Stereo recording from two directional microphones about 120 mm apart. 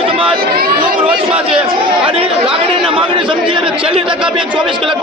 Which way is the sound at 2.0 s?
55° right (ahead or behind).